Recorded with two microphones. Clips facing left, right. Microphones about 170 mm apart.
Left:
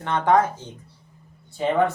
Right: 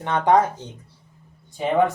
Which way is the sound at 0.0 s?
20° right (ahead or behind).